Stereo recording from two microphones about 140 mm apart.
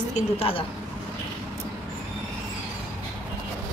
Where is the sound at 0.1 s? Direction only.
45° left (ahead or behind).